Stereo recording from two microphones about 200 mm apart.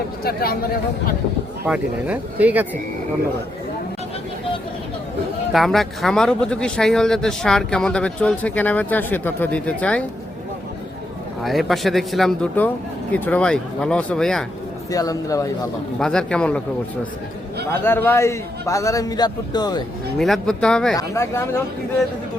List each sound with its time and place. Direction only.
1.6 s speech: 5° right (ahead or behind)
5.5 s speech: centre (ahead or behind)
11.4 s speech: centre (ahead or behind)
14.8 s a man's voice: 15° left (ahead or behind)
16.0 s speech: 5° left (ahead or behind)
17.8 s a man's voice: 10° left (ahead or behind)
20.1 s speech: centre (ahead or behind)
20.9 s a man's voice: 15° left (ahead or behind)